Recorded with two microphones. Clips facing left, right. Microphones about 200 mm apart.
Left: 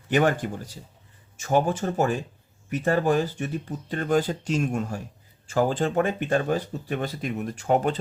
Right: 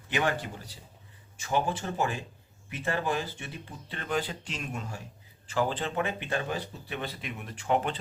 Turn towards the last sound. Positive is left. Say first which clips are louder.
# left 6 dB
turn(degrees=40)  # may be behind; listen again after turning